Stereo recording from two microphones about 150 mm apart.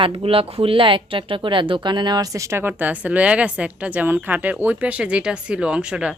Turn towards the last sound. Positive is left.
turn(degrees=-5)  # may be behind; listen again after turning